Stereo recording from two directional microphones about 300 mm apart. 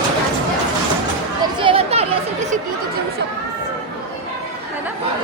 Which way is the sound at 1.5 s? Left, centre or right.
Centre.